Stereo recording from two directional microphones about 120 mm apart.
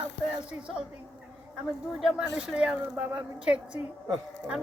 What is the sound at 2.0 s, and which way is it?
Speech, 5° right (ahead or behind).